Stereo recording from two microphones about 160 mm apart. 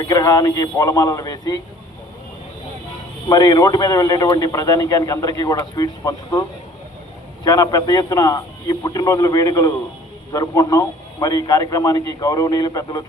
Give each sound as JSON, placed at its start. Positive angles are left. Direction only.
{"t": 0.0, "sound": "a man's voice", "side_deg": 25}
{"t": 3.2, "sound": "a man's voice", "side_deg": 25}
{"t": 7.4, "sound": "a man's voice", "side_deg": 25}